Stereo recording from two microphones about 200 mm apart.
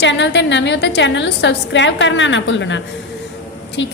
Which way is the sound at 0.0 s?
65° left (ahead or behind).